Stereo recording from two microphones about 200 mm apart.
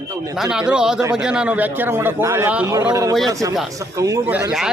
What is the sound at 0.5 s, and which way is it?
A man's voice, 5° right (ahead or behind).